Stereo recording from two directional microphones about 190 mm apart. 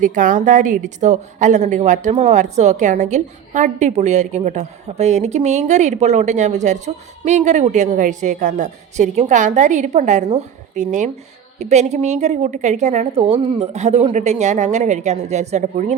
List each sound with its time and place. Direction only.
0.0 s a woman's voice: 45° right (ahead or behind)